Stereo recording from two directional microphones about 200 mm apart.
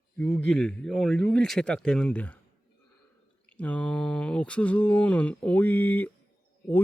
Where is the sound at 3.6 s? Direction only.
5° left (ahead or behind).